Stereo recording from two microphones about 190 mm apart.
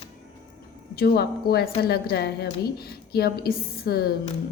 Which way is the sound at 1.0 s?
55° left (ahead or behind).